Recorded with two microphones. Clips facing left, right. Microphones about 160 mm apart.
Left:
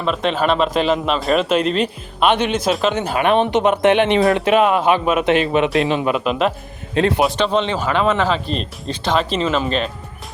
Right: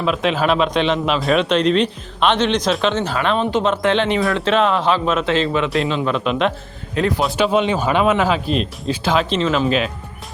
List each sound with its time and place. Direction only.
0.0 s speech: centre (ahead or behind); by 6.1 s 20° left (ahead or behind)
6.1 s speech: 5° left (ahead or behind)
6.9 s speech: 25° left (ahead or behind)
7.3 s speech: 10° right (ahead or behind)